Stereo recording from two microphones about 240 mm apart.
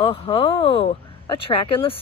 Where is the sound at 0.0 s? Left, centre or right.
Left.